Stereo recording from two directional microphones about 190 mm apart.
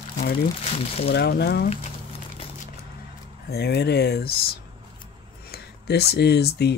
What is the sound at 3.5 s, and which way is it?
Speech, 60° left (ahead or behind).